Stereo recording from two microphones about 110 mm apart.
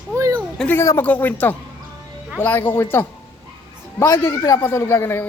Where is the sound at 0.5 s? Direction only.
15° left (ahead or behind).